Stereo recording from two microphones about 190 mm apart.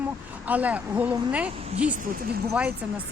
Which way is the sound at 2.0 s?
50° right (ahead or behind).